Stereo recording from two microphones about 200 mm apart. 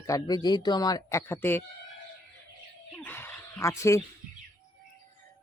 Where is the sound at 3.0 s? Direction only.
10° left (ahead or behind).